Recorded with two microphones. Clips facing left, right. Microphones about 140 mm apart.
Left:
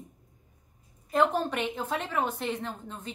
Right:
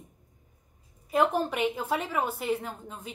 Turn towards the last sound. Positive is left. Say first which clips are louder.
# left 1 dB
turn(degrees=-10)  # may be behind; listen again after turning